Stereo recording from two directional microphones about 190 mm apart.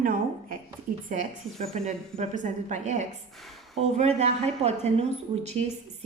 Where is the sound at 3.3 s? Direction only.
Centre (ahead or behind).